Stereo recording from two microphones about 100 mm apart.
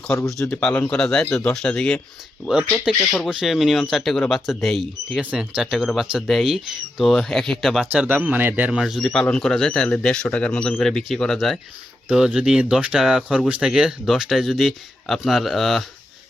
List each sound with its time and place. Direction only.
0.4 s speech: 15° left (ahead or behind)
5.2 s speech: 10° right (ahead or behind)
8.0 s speech: 20° right (ahead or behind)
8.8 s speech: centre (ahead or behind)